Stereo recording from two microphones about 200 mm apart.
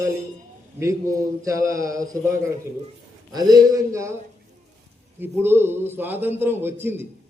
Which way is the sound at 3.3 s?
20° right (ahead or behind).